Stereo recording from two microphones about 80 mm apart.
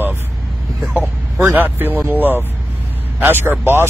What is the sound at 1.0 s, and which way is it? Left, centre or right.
Speech, right.